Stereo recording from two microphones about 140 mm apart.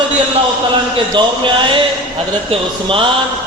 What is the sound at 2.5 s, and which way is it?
Speech, 40° right (ahead or behind).